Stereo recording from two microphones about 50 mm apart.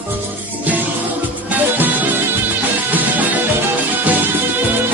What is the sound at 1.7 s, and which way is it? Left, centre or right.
Music, right.